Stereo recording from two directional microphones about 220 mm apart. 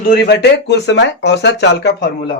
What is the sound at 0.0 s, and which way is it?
Speech, 45° left (ahead or behind).